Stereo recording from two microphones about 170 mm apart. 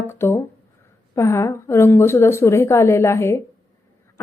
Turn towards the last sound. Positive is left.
turn(degrees=15)  # may be behind; listen again after turning